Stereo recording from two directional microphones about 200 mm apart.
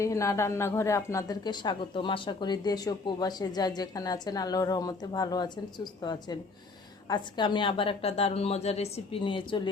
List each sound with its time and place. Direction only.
0.0 s a woman's voice: 15° left (ahead or behind)